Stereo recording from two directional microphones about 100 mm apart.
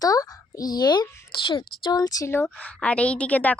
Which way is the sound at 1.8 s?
40° left (ahead or behind).